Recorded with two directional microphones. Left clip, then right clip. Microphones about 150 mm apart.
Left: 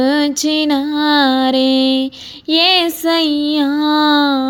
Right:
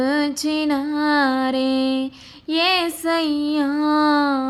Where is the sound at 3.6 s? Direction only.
30° left (ahead or behind).